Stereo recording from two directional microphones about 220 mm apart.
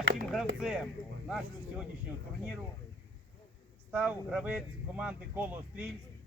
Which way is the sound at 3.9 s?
5° right (ahead or behind).